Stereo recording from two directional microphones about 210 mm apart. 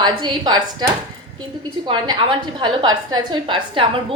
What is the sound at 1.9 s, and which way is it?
A woman's voice, 25° right (ahead or behind).